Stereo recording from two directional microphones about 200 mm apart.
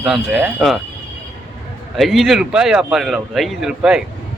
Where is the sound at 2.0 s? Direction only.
Centre (ahead or behind).